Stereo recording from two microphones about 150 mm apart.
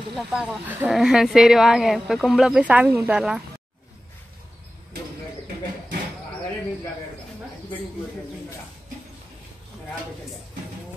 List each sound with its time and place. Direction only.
0.3 s speech: 5° right (ahead or behind)